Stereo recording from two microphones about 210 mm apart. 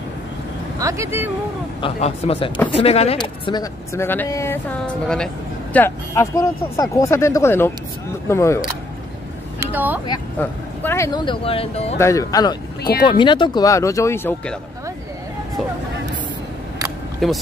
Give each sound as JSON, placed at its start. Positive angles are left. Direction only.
{"t": 0.7, "sound": "speech", "side_deg": -15}
{"t": 1.8, "sound": "speech", "side_deg": 30}
{"t": 9.6, "sound": "speech", "side_deg": -10}
{"t": 10.4, "sound": "speech", "side_deg": 10}
{"t": 11.1, "sound": "speech", "side_deg": 25}
{"t": 12.0, "sound": "speech", "side_deg": 15}
{"t": 17.2, "sound": "speech", "side_deg": 0}